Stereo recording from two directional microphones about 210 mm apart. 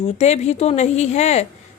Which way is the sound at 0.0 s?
30° left (ahead or behind).